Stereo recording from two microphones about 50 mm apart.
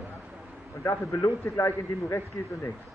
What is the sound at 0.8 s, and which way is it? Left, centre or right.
A man's voice, left.